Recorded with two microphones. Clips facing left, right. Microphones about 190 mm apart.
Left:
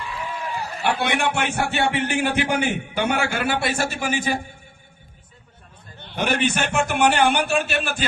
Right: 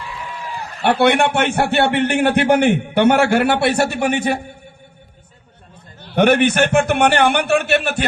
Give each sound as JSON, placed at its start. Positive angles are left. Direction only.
{"t": 0.8, "sound": "a man's voice", "side_deg": -65}
{"t": 6.1, "sound": "a man's voice", "side_deg": -65}